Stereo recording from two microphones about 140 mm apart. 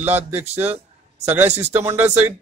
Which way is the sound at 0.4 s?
15° right (ahead or behind).